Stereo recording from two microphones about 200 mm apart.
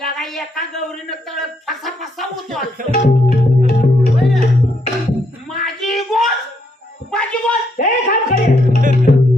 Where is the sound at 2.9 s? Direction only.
40° left (ahead or behind).